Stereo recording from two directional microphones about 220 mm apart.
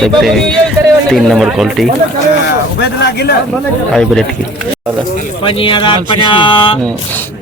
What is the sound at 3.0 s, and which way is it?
Speech, 50° left (ahead or behind).